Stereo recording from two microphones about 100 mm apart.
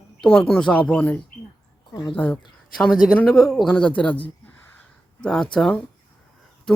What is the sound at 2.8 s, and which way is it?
Speech, centre (ahead or behind).